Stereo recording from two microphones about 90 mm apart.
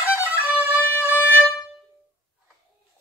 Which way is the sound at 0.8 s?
25° left (ahead or behind).